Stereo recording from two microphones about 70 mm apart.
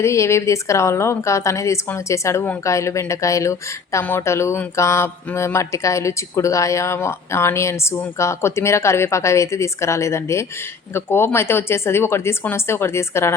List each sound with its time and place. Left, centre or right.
0.0 s speech: left